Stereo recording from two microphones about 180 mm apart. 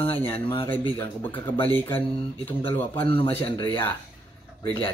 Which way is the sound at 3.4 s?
30° left (ahead or behind).